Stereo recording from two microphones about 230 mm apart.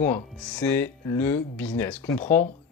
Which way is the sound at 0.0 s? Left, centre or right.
Centre.